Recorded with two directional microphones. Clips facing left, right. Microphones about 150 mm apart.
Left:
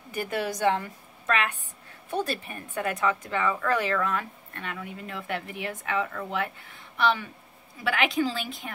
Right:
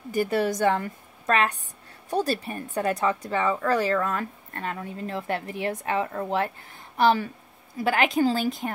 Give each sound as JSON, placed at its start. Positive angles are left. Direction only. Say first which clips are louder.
{"t": 0.1, "sound": "a woman's voice", "louder": "right 6 dB", "side_deg": -40}